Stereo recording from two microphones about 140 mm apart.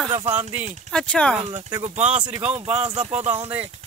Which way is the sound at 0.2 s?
55° right (ahead or behind).